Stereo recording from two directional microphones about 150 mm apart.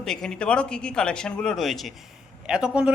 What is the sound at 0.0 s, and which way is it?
A man's voice, 5° left (ahead or behind).